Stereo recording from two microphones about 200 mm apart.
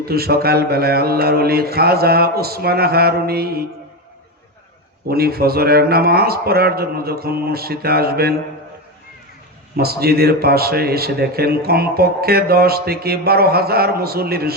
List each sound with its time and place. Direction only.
0.0 s a man's voice: 50° right (ahead or behind)
5.0 s a man's voice: 50° right (ahead or behind)
9.7 s a man's voice: 50° right (ahead or behind)